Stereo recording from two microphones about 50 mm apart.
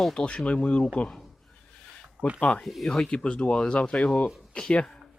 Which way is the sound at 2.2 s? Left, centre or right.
Right.